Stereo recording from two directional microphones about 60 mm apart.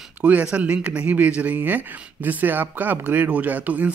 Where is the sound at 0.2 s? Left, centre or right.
Right.